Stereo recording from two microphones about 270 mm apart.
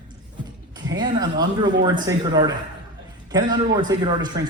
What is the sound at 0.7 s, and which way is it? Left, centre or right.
A man's voice, centre.